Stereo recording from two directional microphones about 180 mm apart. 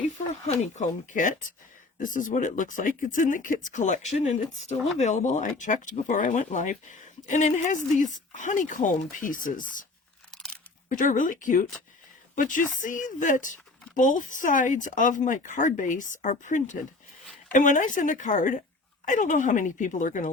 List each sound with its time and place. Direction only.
0.4 s speech: 40° left (ahead or behind)
10.8 s speech: 45° left (ahead or behind)